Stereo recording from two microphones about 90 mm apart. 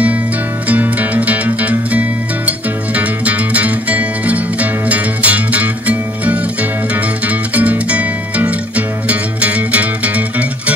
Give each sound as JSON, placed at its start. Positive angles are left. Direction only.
{"t": 0.7, "sound": "music", "side_deg": -15}